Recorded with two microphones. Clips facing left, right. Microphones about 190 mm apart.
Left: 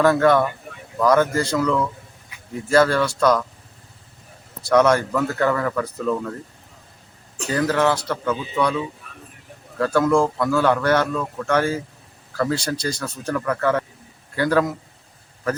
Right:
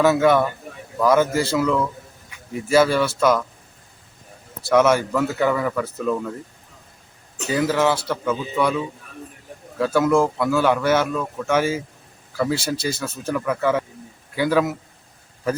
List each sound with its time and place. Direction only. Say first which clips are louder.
0.0 s speech: even; 5° right (ahead or behind)
4.6 s speech: even; 5° right (ahead or behind)
7.4 s a man's voice: even; 5° right (ahead or behind)